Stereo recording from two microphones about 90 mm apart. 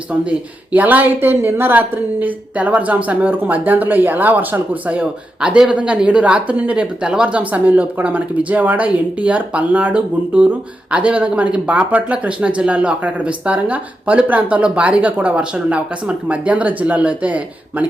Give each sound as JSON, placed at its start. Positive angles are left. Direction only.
{"t": 0.1, "sound": "speech", "side_deg": -15}